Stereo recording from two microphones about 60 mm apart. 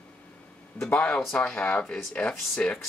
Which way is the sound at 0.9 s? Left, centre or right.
Centre.